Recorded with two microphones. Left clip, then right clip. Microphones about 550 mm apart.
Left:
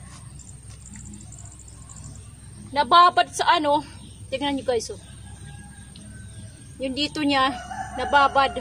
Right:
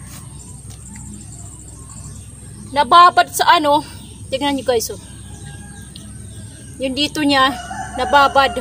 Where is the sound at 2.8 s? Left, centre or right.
Left.